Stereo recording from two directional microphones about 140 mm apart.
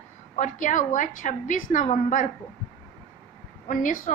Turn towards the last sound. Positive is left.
turn(degrees=70)  # may be behind; listen again after turning